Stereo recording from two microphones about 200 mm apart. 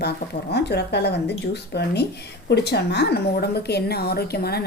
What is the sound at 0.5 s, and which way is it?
Speech, 55° left (ahead or behind).